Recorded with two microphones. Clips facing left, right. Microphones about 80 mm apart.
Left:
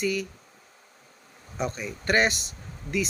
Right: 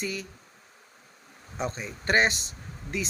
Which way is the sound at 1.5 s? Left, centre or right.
Right.